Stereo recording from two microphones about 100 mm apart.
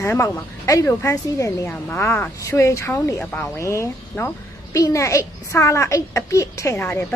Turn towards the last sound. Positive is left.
turn(degrees=25)  # may be behind; listen again after turning